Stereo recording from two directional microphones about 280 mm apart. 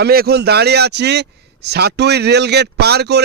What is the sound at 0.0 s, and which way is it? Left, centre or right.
A man's voice, right.